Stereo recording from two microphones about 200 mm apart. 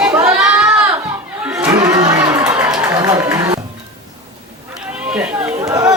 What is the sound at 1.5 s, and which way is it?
Crowd, 15° right (ahead or behind).